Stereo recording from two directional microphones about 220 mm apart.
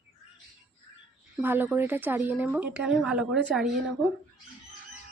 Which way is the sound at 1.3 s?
10° right (ahead or behind).